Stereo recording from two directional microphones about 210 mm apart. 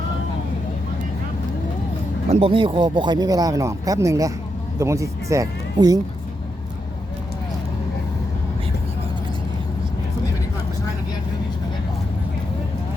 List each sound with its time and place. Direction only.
2.3 s speech: 25° right (ahead or behind)